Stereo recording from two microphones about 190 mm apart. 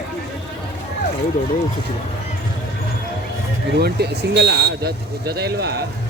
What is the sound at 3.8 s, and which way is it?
Speech, 60° right (ahead or behind).